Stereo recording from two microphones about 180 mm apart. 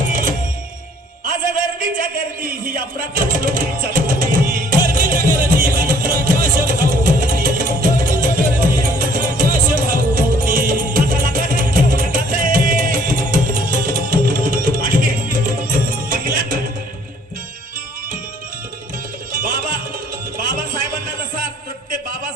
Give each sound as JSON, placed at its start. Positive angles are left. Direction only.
{"t": 0.1, "sound": "music", "side_deg": -50}
{"t": 2.0, "sound": "music", "side_deg": -50}
{"t": 19.3, "sound": "music", "side_deg": -50}
{"t": 21.3, "sound": "a sound", "side_deg": -50}